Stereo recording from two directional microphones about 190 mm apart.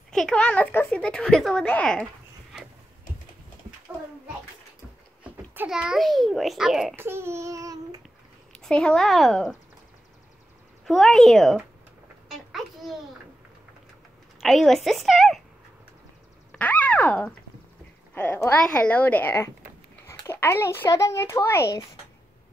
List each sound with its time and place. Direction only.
0.1 s speech: 5° left (ahead or behind)
5.2 s a child's voice: 10° right (ahead or behind)
7.1 s child singing: 15° right (ahead or behind)
8.5 s speech: 5° left (ahead or behind)
10.9 s speech: centre (ahead or behind)
12.3 s a sound: centre (ahead or behind)
14.4 s speech: centre (ahead or behind)
16.5 s a sound: 10° left (ahead or behind)
18.1 s speech: 15° left (ahead or behind)
20.1 s a sound: 15° left (ahead or behind)
20.8 s speech: 15° left (ahead or behind)